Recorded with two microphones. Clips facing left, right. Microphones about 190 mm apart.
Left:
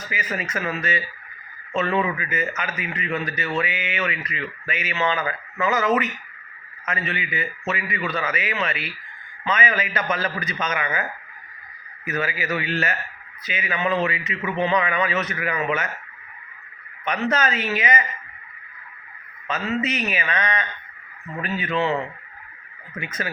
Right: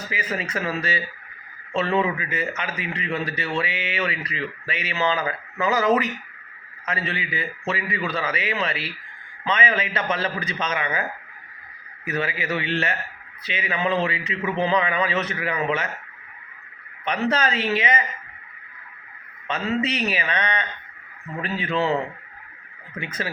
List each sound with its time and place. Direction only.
0.1 s a man's voice: 30° right (ahead or behind)
12.0 s a man's voice: 30° right (ahead or behind)
17.1 s a man's voice: 30° right (ahead or behind)
19.5 s a man's voice: 30° right (ahead or behind)
23.0 s a man's voice: 30° right (ahead or behind)